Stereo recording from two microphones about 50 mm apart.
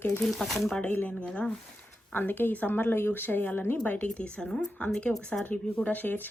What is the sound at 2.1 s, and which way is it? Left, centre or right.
Speech, left.